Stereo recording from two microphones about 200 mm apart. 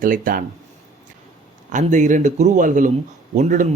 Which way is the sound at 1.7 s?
40° right (ahead or behind).